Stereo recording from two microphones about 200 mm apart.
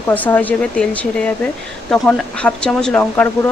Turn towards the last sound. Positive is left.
turn(degrees=10)  # may be behind; listen again after turning